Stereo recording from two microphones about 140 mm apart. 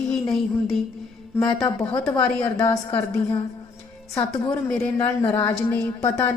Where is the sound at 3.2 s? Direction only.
40° left (ahead or behind).